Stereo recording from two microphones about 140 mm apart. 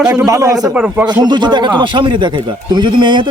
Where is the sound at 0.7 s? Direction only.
10° right (ahead or behind).